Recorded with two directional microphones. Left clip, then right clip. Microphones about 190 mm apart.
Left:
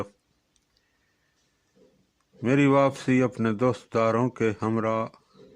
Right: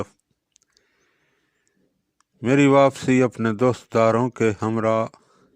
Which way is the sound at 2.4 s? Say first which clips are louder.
Right 5 dB; 35° right (ahead or behind).